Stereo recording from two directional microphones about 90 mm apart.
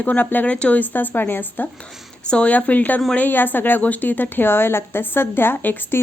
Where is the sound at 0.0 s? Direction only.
20° left (ahead or behind).